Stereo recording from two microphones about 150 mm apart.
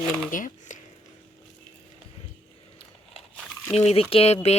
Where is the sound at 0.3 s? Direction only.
60° left (ahead or behind).